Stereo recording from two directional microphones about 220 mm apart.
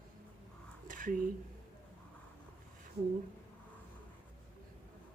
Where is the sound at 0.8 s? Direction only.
35° right (ahead or behind).